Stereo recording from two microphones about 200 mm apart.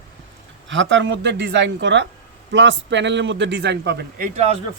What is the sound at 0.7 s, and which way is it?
A man's voice, 65° right (ahead or behind).